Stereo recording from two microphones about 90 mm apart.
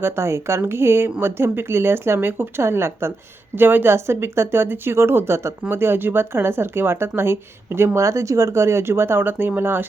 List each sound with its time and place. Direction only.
0.0 s speech: 30° right (ahead or behind)